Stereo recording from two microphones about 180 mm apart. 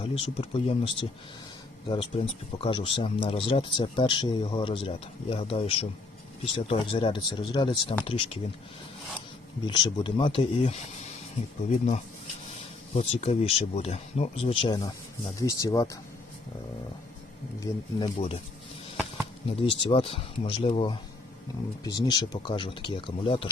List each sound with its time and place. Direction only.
0.0 s speech: 30° left (ahead or behind)
9.6 s speech: 25° left (ahead or behind)
13.0 s speech: 35° left (ahead or behind); by 16.0 s 20° left (ahead or behind)
17.7 s speech: 20° left (ahead or behind)
18.0 s speech: 30° left (ahead or behind)
19.5 s speech: 30° left (ahead or behind)
21.8 s speech: 20° left (ahead or behind)